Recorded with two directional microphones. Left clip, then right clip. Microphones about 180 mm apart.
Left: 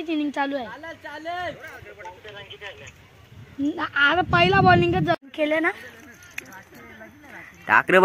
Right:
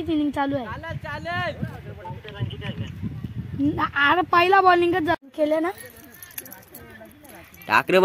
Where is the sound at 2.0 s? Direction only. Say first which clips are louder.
Right 1 dB; 55° right (ahead or behind).